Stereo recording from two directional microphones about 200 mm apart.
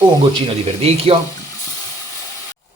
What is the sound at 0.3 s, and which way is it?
Speech, 30° right (ahead or behind).